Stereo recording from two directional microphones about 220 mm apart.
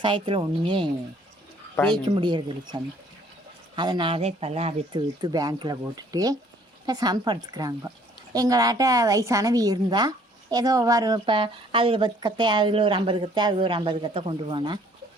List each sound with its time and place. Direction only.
0.0 s speech: 25° right (ahead or behind)
1.7 s speech: 5° left (ahead or behind)
2.0 s a woman's voice: 20° right (ahead or behind)